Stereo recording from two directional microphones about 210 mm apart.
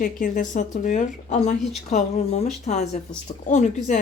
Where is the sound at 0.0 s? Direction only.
40° left (ahead or behind).